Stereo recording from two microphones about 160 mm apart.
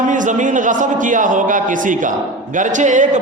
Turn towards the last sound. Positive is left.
turn(degrees=-50)  # may be behind; listen again after turning